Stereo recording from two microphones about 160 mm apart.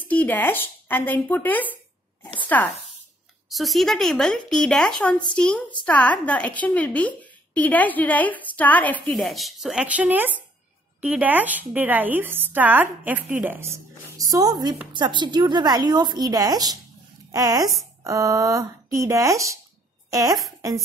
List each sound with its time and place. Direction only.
0.1 s a woman's voice: 10° left (ahead or behind); by 20.4 s 20° right (ahead or behind)